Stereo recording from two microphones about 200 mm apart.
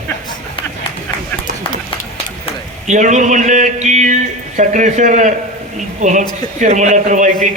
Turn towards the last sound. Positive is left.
turn(degrees=-40)  # may be behind; listen again after turning